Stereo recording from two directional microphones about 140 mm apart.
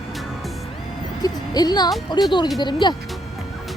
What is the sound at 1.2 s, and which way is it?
Speech, 30° left (ahead or behind).